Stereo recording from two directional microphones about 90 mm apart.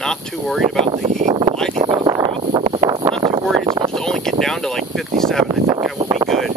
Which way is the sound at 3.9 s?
5° left (ahead or behind).